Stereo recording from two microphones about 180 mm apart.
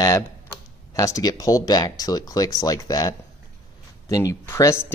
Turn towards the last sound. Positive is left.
turn(degrees=15)  # may be behind; listen again after turning